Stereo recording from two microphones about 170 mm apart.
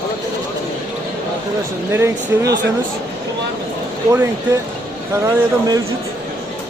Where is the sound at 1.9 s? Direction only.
15° right (ahead or behind).